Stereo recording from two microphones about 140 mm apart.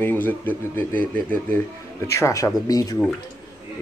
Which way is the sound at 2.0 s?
20° left (ahead or behind).